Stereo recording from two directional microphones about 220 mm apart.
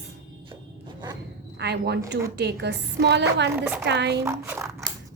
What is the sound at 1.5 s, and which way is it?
A woman's voice, 50° right (ahead or behind).